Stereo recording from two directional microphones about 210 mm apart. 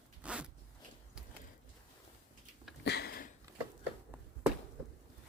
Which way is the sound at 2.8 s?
50° left (ahead or behind).